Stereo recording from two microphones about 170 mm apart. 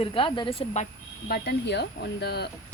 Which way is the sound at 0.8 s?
65° left (ahead or behind).